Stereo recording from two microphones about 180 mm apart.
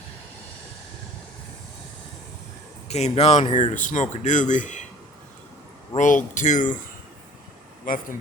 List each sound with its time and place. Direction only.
2.9 s speech: 40° left (ahead or behind)
6.0 s speech: 45° left (ahead or behind)